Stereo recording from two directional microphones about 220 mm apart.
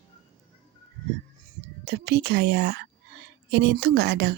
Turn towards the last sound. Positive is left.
turn(degrees=-50)  # may be behind; listen again after turning